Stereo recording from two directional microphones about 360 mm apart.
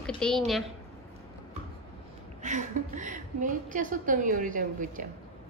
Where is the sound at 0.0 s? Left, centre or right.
Centre.